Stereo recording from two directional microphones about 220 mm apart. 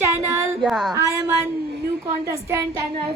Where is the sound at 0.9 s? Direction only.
10° right (ahead or behind).